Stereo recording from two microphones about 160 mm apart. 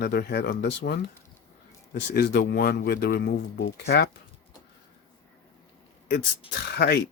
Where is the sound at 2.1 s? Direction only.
90° left.